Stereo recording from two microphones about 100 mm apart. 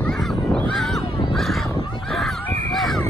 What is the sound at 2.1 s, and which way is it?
Honk, centre (ahead or behind).